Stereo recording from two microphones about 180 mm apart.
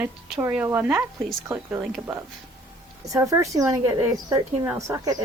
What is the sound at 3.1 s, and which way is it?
Speech, 15° right (ahead or behind).